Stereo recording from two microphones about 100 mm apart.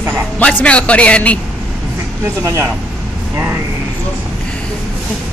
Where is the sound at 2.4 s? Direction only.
30° right (ahead or behind).